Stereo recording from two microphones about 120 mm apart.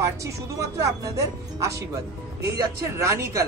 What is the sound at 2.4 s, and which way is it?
Speech, 25° right (ahead or behind).